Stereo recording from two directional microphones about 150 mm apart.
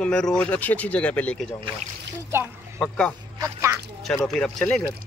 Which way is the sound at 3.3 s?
20° right (ahead or behind).